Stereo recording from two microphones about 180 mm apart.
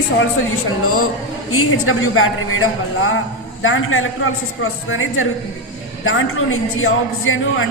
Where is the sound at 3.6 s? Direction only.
90° left.